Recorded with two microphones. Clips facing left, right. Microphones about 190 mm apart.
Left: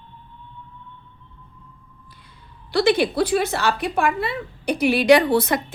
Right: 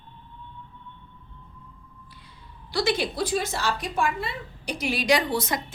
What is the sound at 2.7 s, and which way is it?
A woman's voice, 60° left (ahead or behind).